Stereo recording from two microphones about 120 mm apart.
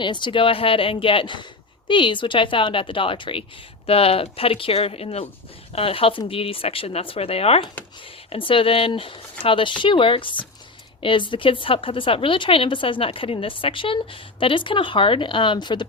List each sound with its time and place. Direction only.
0.0 s a woman's voice: 40° left (ahead or behind)